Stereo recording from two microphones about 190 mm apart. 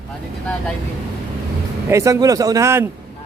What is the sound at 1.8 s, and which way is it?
Speech, 15° right (ahead or behind).